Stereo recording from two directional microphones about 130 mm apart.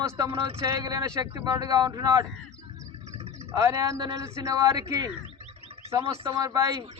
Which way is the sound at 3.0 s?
55° right (ahead or behind).